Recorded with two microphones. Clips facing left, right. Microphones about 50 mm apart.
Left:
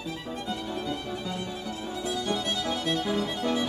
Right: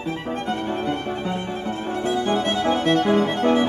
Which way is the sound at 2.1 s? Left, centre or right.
Right.